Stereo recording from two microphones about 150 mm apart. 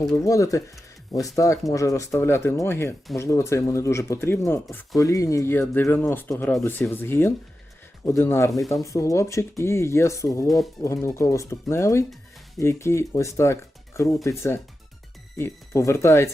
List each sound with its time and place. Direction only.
0.1 s speech: 20° left (ahead or behind)